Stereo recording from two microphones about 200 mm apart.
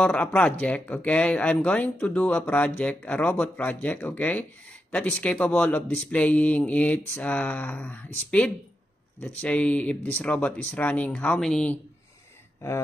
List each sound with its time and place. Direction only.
0.0 s speech: 5° left (ahead or behind)